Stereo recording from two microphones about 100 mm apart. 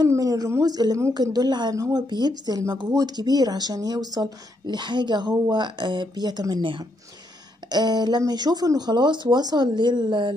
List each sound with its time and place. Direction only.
0.1 s a woman's voice: 35° right (ahead or behind); by 10.3 s 55° right (ahead or behind)